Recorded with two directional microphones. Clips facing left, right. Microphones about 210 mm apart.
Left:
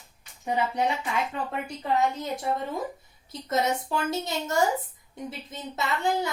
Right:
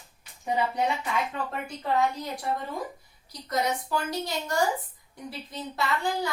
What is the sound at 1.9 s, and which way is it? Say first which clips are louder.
A woman's voice: left 1 dB; 20° left (ahead or behind).